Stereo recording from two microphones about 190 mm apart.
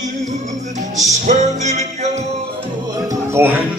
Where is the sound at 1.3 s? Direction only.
40° right (ahead or behind).